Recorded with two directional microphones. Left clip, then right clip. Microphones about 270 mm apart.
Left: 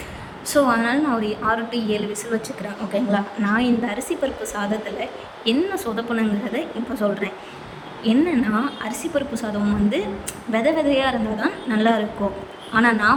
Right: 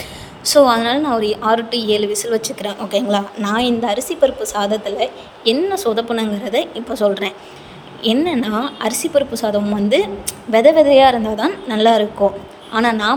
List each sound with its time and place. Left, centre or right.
0.5 s a woman's voice: right